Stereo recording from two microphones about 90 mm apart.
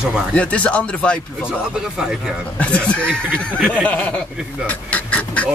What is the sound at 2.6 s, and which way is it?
Speech, 15° left (ahead or behind).